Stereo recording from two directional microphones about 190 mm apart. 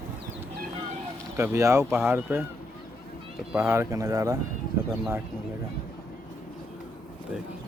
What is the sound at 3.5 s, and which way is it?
Speech, 15° right (ahead or behind).